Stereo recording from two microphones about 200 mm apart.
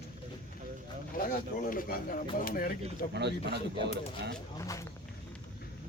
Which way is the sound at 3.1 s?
55° right (ahead or behind).